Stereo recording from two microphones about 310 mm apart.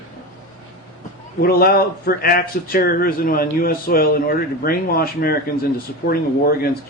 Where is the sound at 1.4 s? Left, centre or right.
Left.